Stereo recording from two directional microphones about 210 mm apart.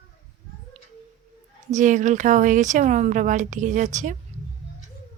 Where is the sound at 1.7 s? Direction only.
35° right (ahead or behind).